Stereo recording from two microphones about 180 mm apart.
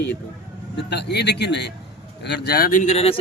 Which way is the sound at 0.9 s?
70° left (ahead or behind).